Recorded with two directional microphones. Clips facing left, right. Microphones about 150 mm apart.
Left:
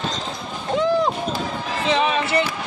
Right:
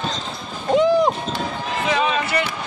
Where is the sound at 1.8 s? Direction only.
30° left (ahead or behind).